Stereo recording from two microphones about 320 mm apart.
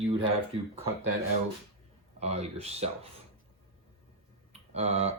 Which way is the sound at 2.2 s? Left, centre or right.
Centre.